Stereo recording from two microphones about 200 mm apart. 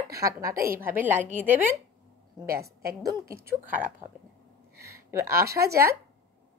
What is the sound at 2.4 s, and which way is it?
Speech, 50° right (ahead or behind).